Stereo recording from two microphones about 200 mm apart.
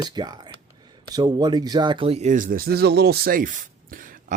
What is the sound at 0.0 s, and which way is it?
Speech, 20° right (ahead or behind).